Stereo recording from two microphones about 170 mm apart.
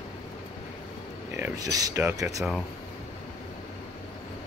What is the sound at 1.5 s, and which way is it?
Speech, 20° right (ahead or behind).